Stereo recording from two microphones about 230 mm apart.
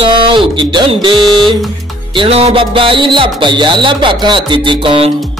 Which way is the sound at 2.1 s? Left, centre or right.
Right.